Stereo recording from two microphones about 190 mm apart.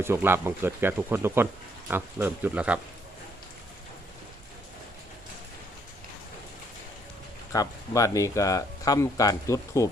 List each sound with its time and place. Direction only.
0.0 s speech: 10° right (ahead or behind)
7.5 s speech: 15° left (ahead or behind)